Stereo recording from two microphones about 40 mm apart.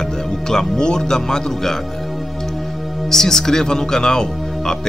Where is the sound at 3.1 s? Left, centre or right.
Centre.